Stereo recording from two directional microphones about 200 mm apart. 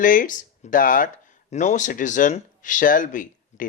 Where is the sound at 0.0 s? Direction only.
40° left (ahead or behind).